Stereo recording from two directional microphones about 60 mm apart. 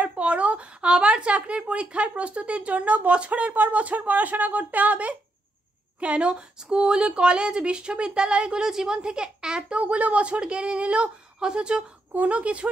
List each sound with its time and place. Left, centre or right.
0.0 s a sound: right
2.1 s speech: right
12.1 s speech: right